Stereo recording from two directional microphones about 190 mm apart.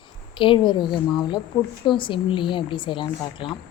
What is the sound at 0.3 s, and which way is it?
Speech, 25° left (ahead or behind).